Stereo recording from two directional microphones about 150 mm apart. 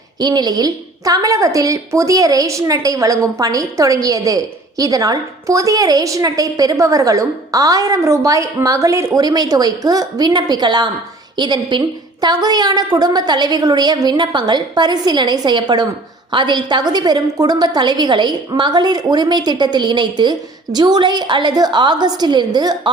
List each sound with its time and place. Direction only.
0.2 s a woman's voice: 25° right (ahead or behind)